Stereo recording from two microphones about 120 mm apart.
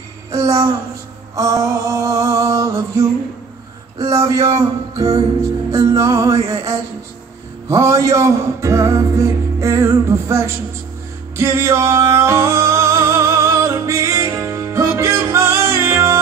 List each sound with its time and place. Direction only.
0.3 s a sound: 30° right (ahead or behind)
1.3 s music: 25° right (ahead or behind)
4.0 s speech: 25° right (ahead or behind)
5.7 s music: 25° right (ahead or behind)